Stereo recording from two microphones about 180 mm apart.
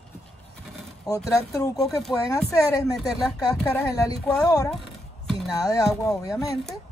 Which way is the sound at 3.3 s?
20° left (ahead or behind).